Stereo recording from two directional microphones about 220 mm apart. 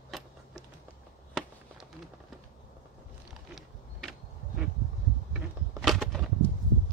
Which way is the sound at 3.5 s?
Centre (ahead or behind).